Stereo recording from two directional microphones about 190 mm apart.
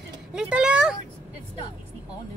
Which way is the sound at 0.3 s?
5° right (ahead or behind).